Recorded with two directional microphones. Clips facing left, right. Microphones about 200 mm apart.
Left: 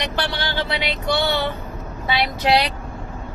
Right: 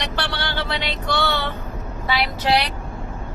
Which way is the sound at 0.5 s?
10° left (ahead or behind).